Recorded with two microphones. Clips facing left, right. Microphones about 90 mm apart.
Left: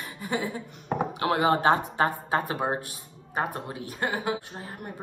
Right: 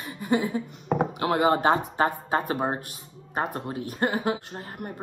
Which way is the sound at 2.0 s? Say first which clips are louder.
Right 1 dB; 20° right (ahead or behind).